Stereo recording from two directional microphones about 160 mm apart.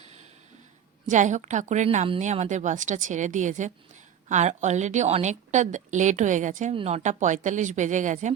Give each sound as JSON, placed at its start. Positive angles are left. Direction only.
{"t": 1.0, "sound": "a woman's voice", "side_deg": -50}